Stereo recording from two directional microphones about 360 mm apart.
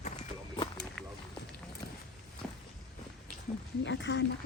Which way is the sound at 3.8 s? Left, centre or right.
Left.